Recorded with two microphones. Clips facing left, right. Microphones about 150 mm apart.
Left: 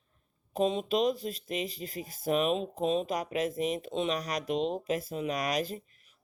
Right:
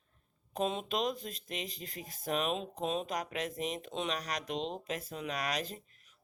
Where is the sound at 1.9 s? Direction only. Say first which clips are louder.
Left 6 dB; 40° right (ahead or behind).